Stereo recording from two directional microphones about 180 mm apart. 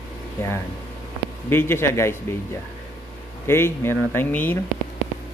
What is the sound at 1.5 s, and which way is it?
Speech, 15° left (ahead or behind).